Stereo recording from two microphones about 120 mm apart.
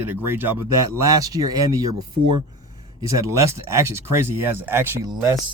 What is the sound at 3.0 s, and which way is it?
Speech, 25° right (ahead or behind).